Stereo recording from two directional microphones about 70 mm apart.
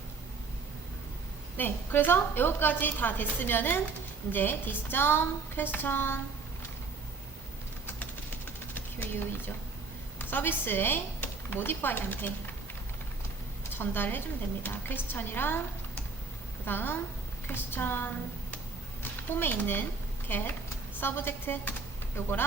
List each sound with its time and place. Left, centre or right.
1.5 s a woman's voice: left
8.7 s a sound: left
10.2 s speech: left
13.7 s a woman's voice: left
19.3 s a woman's voice: left